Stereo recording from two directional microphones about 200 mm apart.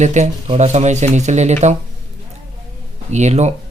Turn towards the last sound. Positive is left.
turn(degrees=-35)  # may be behind; listen again after turning